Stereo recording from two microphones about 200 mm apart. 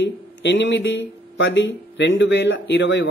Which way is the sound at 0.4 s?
65° left (ahead or behind).